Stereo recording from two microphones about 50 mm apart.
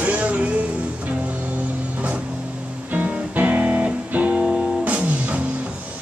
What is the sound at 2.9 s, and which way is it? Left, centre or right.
Music, right.